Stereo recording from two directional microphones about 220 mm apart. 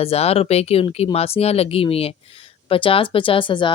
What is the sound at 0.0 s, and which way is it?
Speech, 25° left (ahead or behind).